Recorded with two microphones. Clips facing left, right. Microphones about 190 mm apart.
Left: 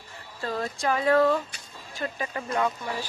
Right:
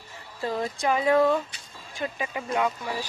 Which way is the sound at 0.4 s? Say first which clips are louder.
Right 2 dB; 20° right (ahead or behind).